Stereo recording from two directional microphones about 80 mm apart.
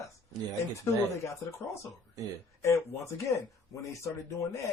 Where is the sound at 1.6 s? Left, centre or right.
Left.